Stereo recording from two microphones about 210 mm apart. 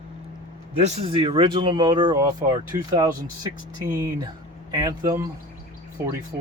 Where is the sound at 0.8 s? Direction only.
30° right (ahead or behind); by 3.2 s 15° right (ahead or behind).